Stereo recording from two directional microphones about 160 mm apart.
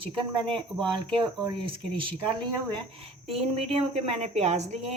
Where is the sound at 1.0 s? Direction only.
30° right (ahead or behind).